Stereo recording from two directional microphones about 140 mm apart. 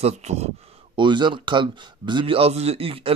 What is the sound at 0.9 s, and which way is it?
Speech, 35° right (ahead or behind).